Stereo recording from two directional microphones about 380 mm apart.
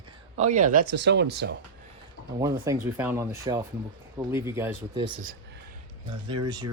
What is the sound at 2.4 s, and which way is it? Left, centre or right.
Speech, centre.